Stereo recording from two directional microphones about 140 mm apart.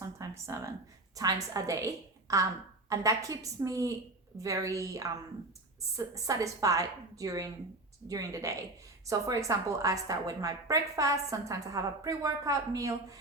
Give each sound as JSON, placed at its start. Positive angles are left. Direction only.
{"t": 0.2, "sound": "a woman's voice", "side_deg": -20}
{"t": 6.1, "sound": "a woman's voice", "side_deg": -25}